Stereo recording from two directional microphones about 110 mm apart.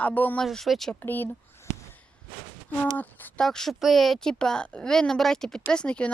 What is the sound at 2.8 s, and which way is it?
Speech, 15° left (ahead or behind).